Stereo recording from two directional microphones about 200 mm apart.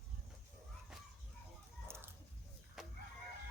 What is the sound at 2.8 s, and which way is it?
Chicken, centre (ahead or behind).